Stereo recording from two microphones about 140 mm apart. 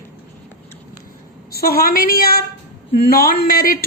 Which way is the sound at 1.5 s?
90° left.